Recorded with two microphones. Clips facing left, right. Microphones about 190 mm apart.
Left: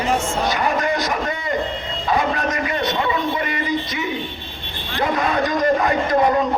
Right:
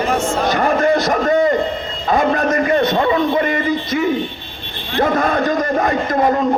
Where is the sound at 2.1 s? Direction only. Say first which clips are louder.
Right 5 dB; 45° right (ahead or behind).